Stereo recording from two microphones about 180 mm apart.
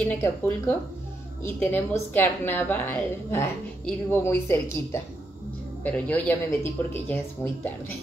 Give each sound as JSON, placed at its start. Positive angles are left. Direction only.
{"t": 0.0, "sound": "a woman's voice", "side_deg": 10}